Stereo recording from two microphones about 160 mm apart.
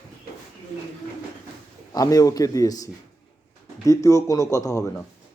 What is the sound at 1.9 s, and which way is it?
Speech, 25° left (ahead or behind).